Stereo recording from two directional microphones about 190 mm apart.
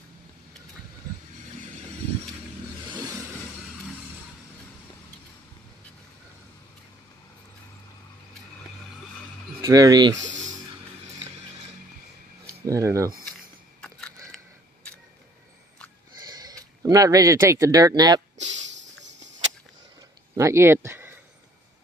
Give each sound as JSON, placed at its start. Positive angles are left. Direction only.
{"t": 9.6, "sound": "speech", "side_deg": -20}
{"t": 12.6, "sound": "speech", "side_deg": -15}
{"t": 13.7, "sound": "biting", "side_deg": 5}
{"t": 16.2, "sound": "speech", "side_deg": -20}
{"t": 18.4, "sound": "a sound", "side_deg": -70}
{"t": 20.3, "sound": "speech", "side_deg": -15}